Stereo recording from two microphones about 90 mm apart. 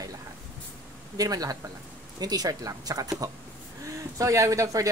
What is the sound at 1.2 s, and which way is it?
Speech, 45° right (ahead or behind).